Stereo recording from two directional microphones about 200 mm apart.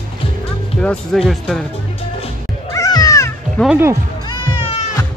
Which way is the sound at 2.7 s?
20° left (ahead or behind).